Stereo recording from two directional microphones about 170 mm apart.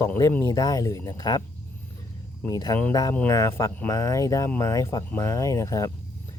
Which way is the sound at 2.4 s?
20° left (ahead or behind).